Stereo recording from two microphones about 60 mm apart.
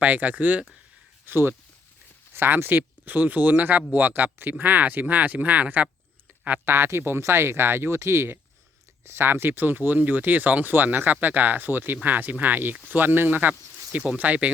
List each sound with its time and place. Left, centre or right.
0.0 s speech: right
1.2 s speech: right
6.7 s speech: right